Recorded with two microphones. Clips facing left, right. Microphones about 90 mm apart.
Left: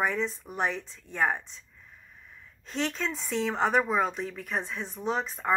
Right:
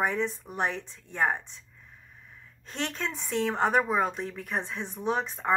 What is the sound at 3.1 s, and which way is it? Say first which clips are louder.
Speech: right 1 dB; 15° right (ahead or behind).